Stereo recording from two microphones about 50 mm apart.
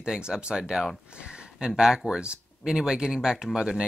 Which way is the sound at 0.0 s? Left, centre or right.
Centre.